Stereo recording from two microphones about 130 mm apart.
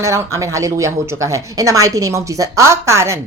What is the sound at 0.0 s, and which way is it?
Speech, 25° right (ahead or behind).